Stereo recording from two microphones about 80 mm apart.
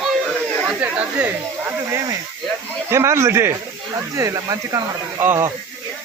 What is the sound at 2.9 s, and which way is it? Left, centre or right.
Speech, right.